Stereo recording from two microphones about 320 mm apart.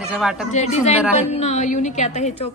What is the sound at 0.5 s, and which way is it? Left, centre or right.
A woman's voice, left.